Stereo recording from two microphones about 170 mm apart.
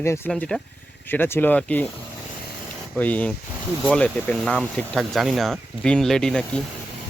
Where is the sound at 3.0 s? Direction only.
10° left (ahead or behind).